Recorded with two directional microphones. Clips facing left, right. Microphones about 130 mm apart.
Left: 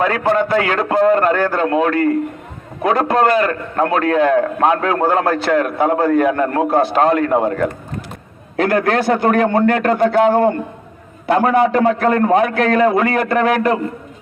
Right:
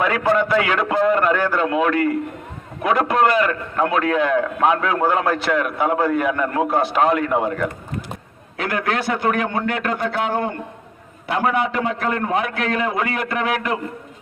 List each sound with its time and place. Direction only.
0.0 s a man's voice: 35° left (ahead or behind)